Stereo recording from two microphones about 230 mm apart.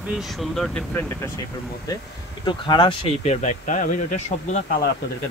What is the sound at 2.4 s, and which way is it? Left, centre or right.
Speech, centre.